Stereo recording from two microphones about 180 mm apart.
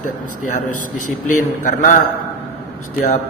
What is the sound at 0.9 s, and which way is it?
A man's voice, 45° left (ahead or behind).